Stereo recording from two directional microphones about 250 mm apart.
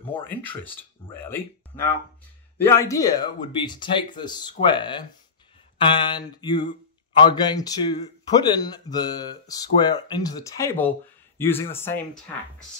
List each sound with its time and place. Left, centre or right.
0.0 s speech: centre